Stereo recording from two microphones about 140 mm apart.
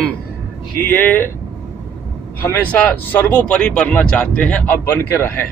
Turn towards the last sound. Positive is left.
turn(degrees=15)  # may be behind; listen again after turning